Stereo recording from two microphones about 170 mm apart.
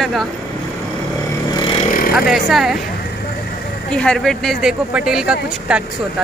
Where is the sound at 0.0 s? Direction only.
Centre (ahead or behind).